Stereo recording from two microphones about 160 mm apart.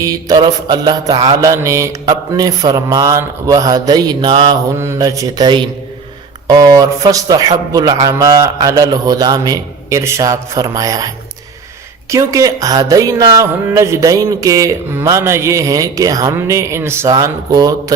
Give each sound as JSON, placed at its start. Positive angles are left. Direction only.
{"t": 0.0, "sound": "speech", "side_deg": -25}
{"t": 4.8, "sound": "speech", "side_deg": -20}